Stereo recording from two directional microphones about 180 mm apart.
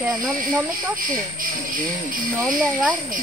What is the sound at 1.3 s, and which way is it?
Speech, 50° right (ahead or behind).